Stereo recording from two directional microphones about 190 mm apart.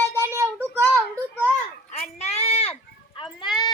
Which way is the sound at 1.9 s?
35° left (ahead or behind).